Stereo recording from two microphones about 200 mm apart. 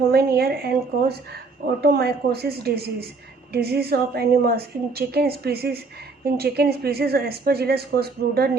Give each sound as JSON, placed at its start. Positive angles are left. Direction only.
{"t": 0.1, "sound": "a woman's voice", "side_deg": -50}